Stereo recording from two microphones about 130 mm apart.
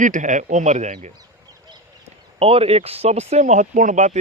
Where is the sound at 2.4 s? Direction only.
45° right (ahead or behind); by 4.2 s 65° right (ahead or behind).